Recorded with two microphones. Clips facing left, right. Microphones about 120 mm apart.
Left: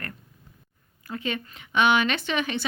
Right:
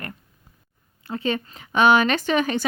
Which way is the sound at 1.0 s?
35° right (ahead or behind).